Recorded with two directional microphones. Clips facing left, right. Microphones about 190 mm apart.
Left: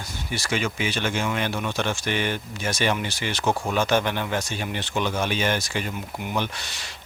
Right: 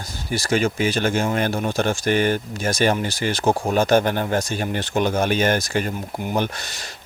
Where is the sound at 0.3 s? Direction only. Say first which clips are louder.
Right 6 dB; 40° right (ahead or behind).